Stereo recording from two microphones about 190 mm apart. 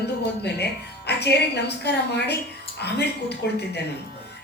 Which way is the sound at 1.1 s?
60° left (ahead or behind).